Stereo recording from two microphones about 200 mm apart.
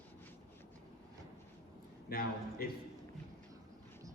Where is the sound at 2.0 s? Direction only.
50° left (ahead or behind).